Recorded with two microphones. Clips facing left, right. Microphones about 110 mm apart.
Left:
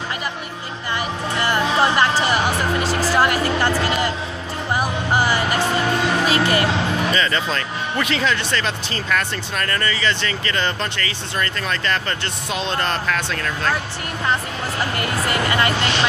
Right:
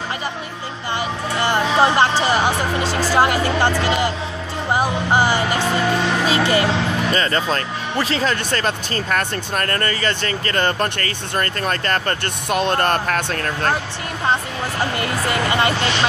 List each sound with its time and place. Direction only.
0.9 s music: 25° right (ahead or behind)
7.1 s speech: 40° right (ahead or behind)
15.0 s speech: 20° right (ahead or behind)